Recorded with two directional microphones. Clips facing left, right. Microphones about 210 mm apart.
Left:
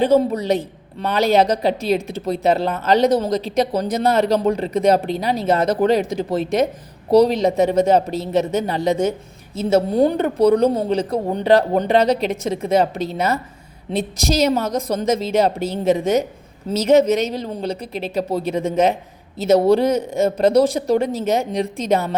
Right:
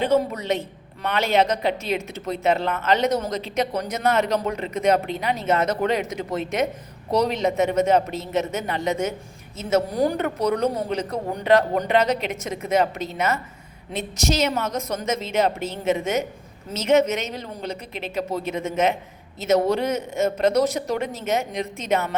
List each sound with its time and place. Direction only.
0.0 s speech: 35° left (ahead or behind)